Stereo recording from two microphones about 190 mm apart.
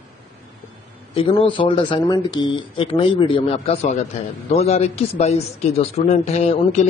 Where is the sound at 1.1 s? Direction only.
30° left (ahead or behind).